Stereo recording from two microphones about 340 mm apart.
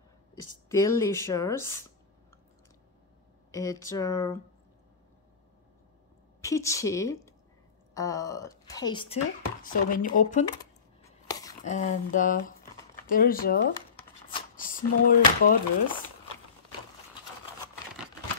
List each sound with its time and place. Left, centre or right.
0.7 s speech: centre
3.5 s speech: centre
6.4 s a woman's voice: centre
11.2 s a sound: centre
11.6 s speech: left
14.3 s a sound: left